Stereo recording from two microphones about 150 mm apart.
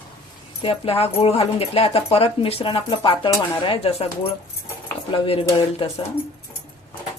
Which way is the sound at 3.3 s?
20° left (ahead or behind).